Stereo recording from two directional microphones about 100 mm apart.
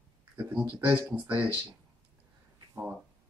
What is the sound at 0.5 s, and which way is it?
Speech, 15° right (ahead or behind).